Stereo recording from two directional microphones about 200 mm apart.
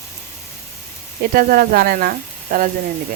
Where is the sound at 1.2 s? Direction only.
45° right (ahead or behind).